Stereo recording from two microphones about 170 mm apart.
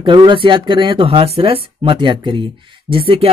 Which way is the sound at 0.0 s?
30° right (ahead or behind).